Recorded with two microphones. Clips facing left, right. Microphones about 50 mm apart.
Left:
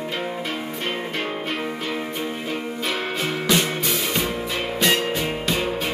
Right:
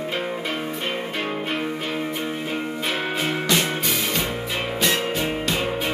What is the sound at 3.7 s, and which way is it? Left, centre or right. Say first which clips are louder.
Music: even; centre.